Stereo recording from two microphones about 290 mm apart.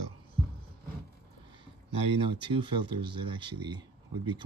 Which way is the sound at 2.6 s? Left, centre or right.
Centre.